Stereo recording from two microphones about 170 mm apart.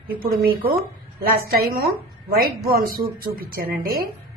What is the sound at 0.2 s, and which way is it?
A woman's voice, 60° right (ahead or behind).